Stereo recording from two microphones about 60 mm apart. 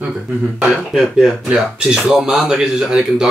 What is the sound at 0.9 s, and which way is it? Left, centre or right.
Speech, centre.